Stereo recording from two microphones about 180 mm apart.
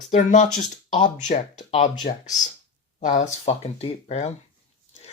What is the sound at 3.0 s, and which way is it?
Speech, 40° left (ahead or behind).